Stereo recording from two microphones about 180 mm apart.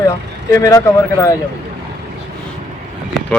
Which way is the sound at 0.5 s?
20° left (ahead or behind).